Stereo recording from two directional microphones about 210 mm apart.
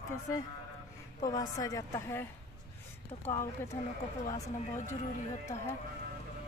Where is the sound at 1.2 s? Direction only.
20° left (ahead or behind).